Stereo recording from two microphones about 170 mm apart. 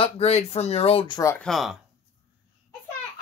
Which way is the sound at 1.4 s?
Centre (ahead or behind).